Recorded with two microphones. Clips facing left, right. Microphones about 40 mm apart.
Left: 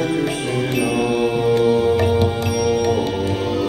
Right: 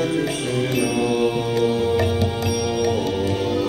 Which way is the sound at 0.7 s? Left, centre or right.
Left.